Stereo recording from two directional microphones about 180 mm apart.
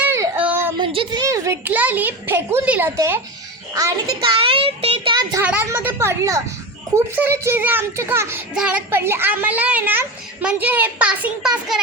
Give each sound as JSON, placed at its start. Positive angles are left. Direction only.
{"t": 0.0, "sound": "child singing", "side_deg": -10}
{"t": 0.8, "sound": "a child's voice", "side_deg": -25}
{"t": 4.3, "sound": "a child's voice", "side_deg": -30}
{"t": 5.4, "sound": "a child's voice", "side_deg": -10}